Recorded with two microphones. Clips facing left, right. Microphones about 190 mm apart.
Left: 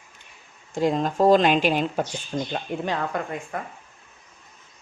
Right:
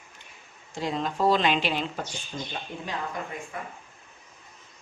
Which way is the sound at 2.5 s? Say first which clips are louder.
Left 6 dB; 65° left (ahead or behind).